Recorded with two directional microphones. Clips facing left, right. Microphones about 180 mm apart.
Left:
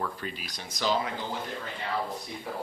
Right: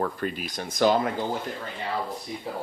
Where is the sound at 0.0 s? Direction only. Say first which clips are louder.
Right 7 dB; 50° right (ahead or behind).